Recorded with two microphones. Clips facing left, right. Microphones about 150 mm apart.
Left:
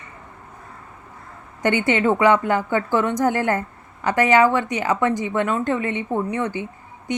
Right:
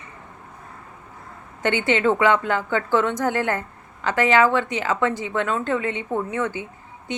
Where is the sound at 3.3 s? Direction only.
45° left (ahead or behind).